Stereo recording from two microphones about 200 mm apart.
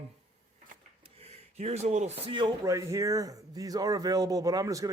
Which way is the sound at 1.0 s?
30° right (ahead or behind).